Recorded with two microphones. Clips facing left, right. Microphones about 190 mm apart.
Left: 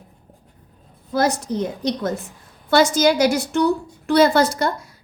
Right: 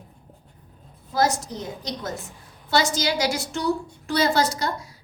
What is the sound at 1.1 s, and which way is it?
A woman's voice, 60° left (ahead or behind).